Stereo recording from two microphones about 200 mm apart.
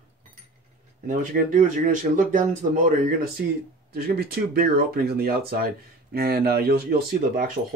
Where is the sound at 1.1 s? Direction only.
40° right (ahead or behind).